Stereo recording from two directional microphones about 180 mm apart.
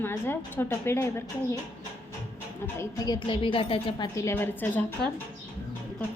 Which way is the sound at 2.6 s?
15° left (ahead or behind).